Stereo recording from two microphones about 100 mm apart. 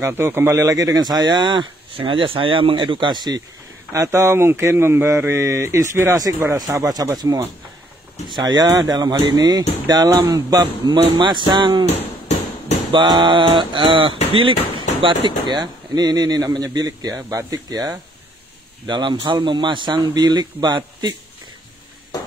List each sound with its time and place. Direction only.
0.0 s speech: 25° right (ahead or behind); by 3.4 s 45° right (ahead or behind)
3.9 s a man's voice: 30° right (ahead or behind); by 11.8 s 50° right (ahead or behind)
12.9 s speech: 50° right (ahead or behind)
15.6 s a man's voice: 40° right (ahead or behind)